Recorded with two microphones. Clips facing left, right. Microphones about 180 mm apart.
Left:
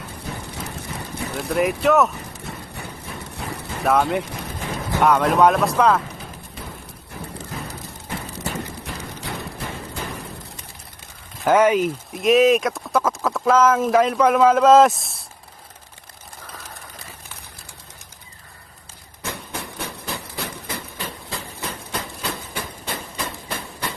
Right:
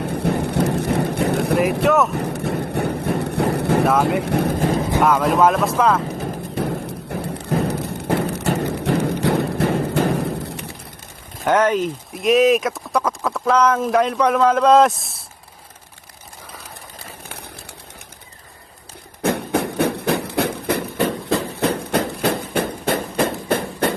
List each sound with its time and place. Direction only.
0.0 s vehicle: 65° right (ahead or behind)
1.8 s speech: centre (ahead or behind)
2.1 s a sound: 65° right (ahead or behind)
4.2 s speech: 60° right (ahead or behind)
4.9 s speech: centre (ahead or behind)
6.1 s thump: 65° right (ahead or behind)
11.4 s speech: 10° left (ahead or behind)
19.2 s a sound: 60° right (ahead or behind)